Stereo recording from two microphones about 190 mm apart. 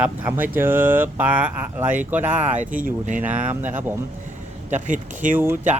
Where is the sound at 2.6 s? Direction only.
45° right (ahead or behind).